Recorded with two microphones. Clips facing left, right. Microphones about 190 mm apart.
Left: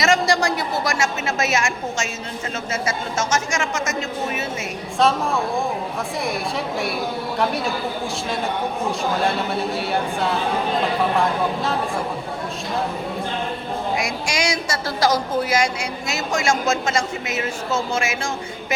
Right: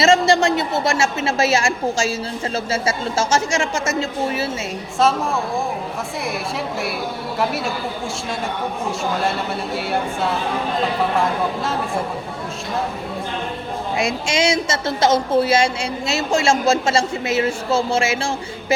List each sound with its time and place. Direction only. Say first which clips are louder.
0.0 s a woman's voice: right 4 dB; 25° right (ahead or behind)
7.3 s speech: right 1 dB; 5° right (ahead or behind)
13.9 s a woman's voice: right 7 dB; 25° right (ahead or behind)